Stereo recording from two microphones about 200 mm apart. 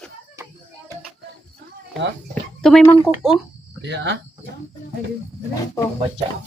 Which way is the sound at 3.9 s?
60° right (ahead or behind).